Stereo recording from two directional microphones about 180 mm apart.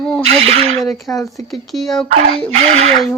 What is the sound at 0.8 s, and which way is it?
Speech, centre (ahead or behind).